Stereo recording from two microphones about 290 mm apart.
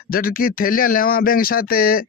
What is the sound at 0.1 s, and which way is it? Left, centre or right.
Speech, left.